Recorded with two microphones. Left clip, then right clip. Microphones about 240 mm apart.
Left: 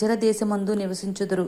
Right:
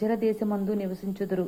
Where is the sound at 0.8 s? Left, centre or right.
Left.